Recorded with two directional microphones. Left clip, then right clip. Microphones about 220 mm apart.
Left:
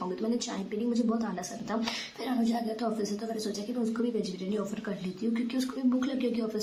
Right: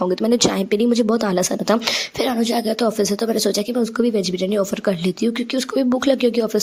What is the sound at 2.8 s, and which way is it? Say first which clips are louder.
Speech: right 14 dB; 40° right (ahead or behind).